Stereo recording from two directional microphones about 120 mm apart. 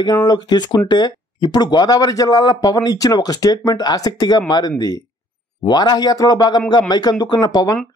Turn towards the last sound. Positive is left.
turn(degrees=35)  # may be behind; listen again after turning